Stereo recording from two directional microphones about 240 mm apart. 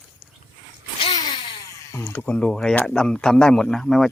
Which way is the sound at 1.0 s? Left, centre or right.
Centre.